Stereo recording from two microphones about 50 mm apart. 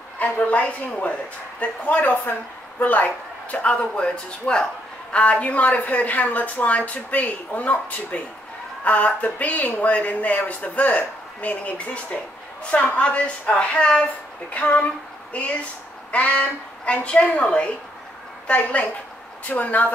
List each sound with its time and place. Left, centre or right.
0.2 s a woman's voice: left
16.1 s a woman's voice: left